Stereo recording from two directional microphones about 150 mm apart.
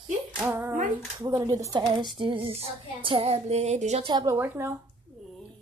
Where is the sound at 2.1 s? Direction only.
35° right (ahead or behind).